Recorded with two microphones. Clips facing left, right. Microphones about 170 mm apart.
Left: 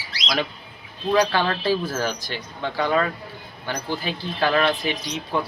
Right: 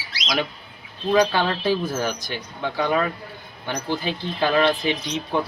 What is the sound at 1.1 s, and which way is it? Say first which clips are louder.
Speech: right 1 dB; 10° right (ahead or behind).